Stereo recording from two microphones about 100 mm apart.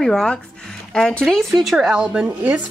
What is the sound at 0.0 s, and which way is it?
A woman's voice, 5° left (ahead or behind).